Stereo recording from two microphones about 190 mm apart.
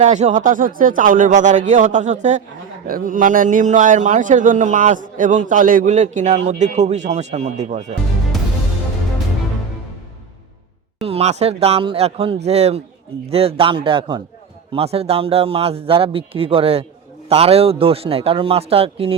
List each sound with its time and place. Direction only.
0.0 s a man's voice: 35° right (ahead or behind)
11.0 s a man's voice: 30° right (ahead or behind)